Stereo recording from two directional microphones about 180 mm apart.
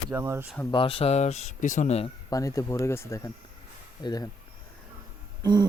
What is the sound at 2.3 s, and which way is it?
Speech, 15° left (ahead or behind).